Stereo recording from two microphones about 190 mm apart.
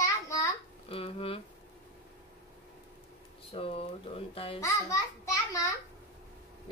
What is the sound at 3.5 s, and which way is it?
Speech, 30° left (ahead or behind).